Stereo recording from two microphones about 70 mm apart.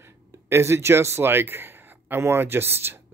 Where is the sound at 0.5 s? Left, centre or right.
Right.